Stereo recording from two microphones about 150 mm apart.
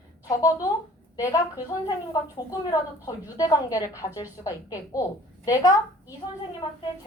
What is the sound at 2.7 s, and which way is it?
A woman's voice, 25° left (ahead or behind).